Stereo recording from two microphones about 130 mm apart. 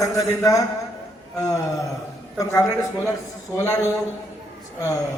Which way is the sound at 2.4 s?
25° left (ahead or behind).